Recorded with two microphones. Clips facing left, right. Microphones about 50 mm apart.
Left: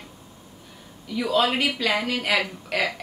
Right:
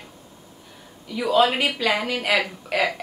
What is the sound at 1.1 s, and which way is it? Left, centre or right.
Speech, centre.